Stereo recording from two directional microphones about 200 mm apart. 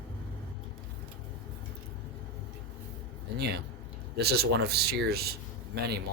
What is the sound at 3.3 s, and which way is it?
Speech, 55° right (ahead or behind).